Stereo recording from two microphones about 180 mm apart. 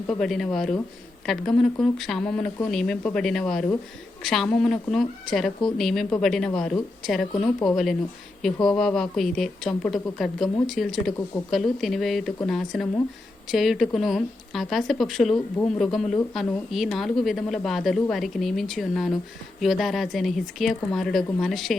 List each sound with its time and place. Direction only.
0.1 s speech: centre (ahead or behind)